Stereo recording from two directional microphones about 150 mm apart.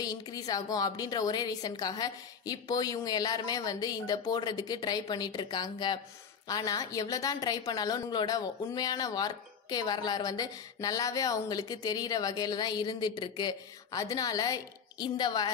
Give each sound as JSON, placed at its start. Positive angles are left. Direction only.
{"t": 0.0, "sound": "a woman's voice", "side_deg": 25}